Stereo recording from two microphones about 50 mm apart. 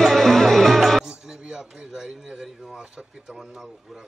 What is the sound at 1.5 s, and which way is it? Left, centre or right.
Speech, centre.